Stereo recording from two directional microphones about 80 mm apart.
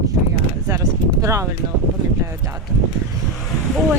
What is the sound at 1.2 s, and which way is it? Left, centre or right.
Speech, right.